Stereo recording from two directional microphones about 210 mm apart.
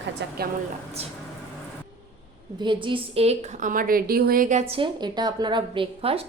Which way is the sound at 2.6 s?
25° right (ahead or behind).